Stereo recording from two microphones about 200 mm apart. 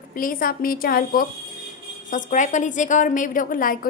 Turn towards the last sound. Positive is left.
turn(degrees=45)  # may be behind; listen again after turning